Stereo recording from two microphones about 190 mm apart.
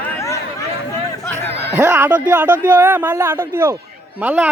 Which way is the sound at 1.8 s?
10° right (ahead or behind).